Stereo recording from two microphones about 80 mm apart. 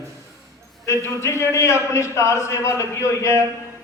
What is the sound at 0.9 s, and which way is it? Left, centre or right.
A man's voice, left.